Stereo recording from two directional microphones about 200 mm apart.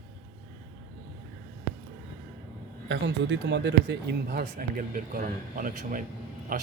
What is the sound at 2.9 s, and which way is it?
Speech, 65° right (ahead or behind).